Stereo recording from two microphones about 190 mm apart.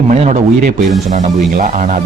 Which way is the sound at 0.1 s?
40° right (ahead or behind).